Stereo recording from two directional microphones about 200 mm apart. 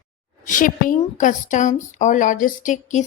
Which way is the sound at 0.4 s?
40° left (ahead or behind).